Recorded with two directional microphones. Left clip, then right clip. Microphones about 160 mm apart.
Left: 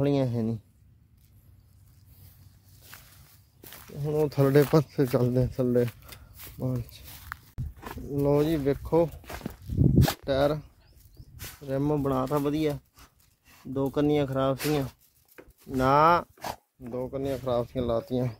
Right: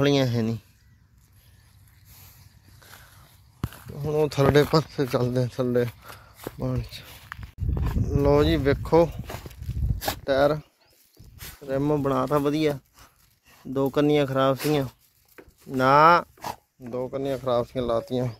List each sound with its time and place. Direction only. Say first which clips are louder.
0.0 s speech: right 4 dB; 5° left (ahead or behind)
4.0 s speech: right 3 dB; 20° left (ahead or behind)
4.7 s speech: right 1 dB; 45° left (ahead or behind)
5.1 s speech: right 3 dB; 30° left (ahead or behind)
6.6 s speech: right 2 dB; centre (ahead or behind)
10.2 s speech: right 8 dB; centre (ahead or behind)
13.7 s speech: right 4 dB; 5° right (ahead or behind)
15.4 s a sound: right 2 dB; 35° right (ahead or behind)
15.8 s speech: right 4 dB; 5° left (ahead or behind)